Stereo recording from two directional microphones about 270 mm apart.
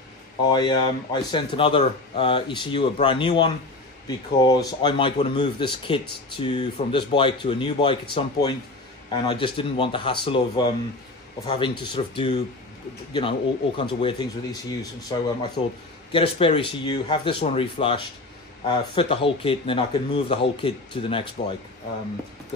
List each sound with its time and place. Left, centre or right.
0.4 s speech: centre